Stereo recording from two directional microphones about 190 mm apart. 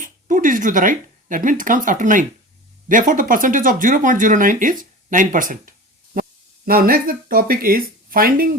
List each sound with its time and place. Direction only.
0.0 s speech: 45° right (ahead or behind)